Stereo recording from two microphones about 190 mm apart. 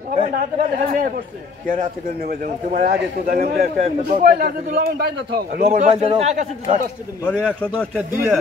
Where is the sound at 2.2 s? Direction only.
50° right (ahead or behind).